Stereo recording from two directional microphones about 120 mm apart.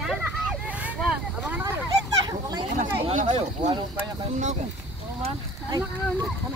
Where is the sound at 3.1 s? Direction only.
90° right.